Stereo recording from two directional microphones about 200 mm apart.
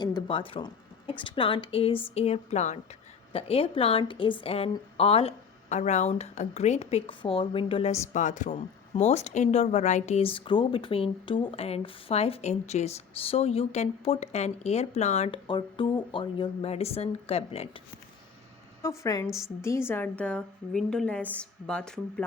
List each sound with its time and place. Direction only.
0.0 s a sound: 25° left (ahead or behind)
1.2 s a woman's voice: 25° left (ahead or behind)
18.8 s a woman's voice: 15° left (ahead or behind)